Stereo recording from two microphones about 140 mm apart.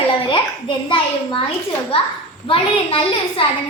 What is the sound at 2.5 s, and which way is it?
Speech, 40° left (ahead or behind).